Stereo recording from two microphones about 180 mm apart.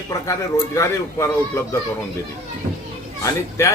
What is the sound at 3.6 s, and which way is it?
Speech, 15° left (ahead or behind).